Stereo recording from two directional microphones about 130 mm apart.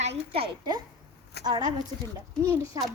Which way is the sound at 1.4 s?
35° right (ahead or behind).